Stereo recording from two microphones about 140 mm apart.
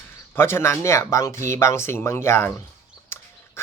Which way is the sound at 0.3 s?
15° left (ahead or behind).